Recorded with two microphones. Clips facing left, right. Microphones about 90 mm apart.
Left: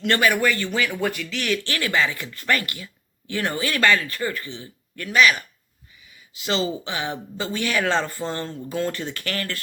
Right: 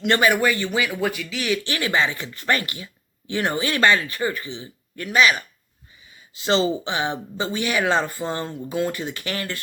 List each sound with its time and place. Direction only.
0.0 s speech: 20° right (ahead or behind)
0.9 s speech: centre (ahead or behind); by 9.6 s 20° right (ahead or behind)